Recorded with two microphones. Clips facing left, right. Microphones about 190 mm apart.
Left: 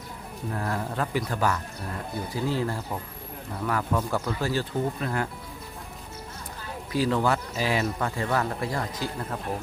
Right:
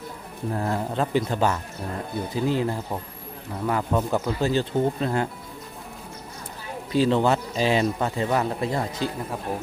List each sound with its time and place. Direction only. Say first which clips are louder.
0.5 s speech: right 4 dB; 25° right (ahead or behind)
6.9 s speech: right 4 dB; 25° right (ahead or behind)